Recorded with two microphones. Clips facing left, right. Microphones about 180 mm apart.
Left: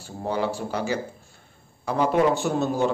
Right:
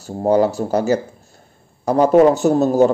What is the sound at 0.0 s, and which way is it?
A man's voice, 40° right (ahead or behind).